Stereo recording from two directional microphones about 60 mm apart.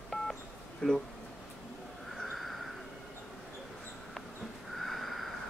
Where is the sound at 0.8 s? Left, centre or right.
Centre.